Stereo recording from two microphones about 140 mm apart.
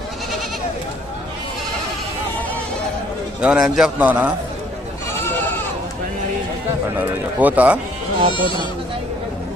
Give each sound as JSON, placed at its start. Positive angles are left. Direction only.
{"t": 3.4, "sound": "a man's voice", "side_deg": -5}
{"t": 7.0, "sound": "a man's voice", "side_deg": -10}
{"t": 8.3, "sound": "speech", "side_deg": 35}